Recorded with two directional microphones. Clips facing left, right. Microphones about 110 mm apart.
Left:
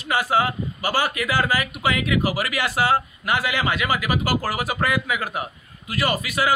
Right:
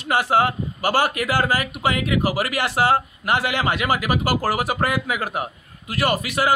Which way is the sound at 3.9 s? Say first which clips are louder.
Right 2 dB; 45° right (ahead or behind).